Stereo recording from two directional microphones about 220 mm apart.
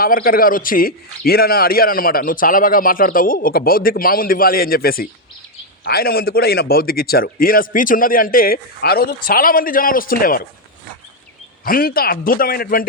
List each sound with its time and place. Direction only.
0.0 s a man's voice: 40° left (ahead or behind)
11.6 s a man's voice: 40° left (ahead or behind)